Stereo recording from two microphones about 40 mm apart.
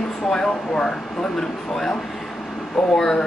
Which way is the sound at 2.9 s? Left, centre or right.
Centre.